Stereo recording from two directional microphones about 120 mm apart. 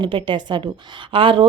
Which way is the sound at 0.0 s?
45° right (ahead or behind).